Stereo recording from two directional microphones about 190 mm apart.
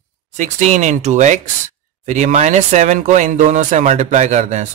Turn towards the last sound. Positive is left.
turn(degrees=-40)  # may be behind; listen again after turning